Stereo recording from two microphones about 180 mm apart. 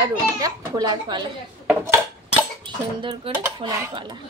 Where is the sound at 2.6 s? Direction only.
25° right (ahead or behind).